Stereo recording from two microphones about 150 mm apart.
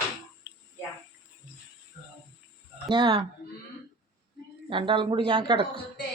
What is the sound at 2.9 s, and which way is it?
Speech, 30° right (ahead or behind).